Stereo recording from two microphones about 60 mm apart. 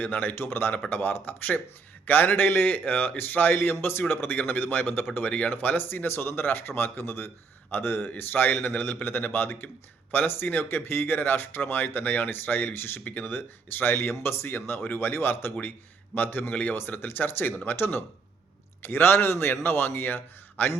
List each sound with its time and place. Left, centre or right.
0.0 s speech: left